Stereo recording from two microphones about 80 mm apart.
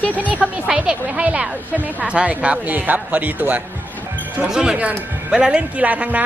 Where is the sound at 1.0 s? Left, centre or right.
Centre.